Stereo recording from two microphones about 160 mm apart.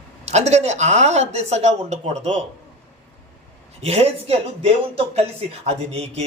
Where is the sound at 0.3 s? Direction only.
45° right (ahead or behind).